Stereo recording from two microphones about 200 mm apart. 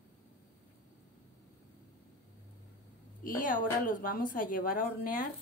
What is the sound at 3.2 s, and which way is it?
A woman's voice, 45° left (ahead or behind).